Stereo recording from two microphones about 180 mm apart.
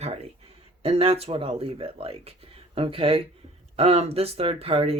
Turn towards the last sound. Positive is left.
turn(degrees=-35)  # may be behind; listen again after turning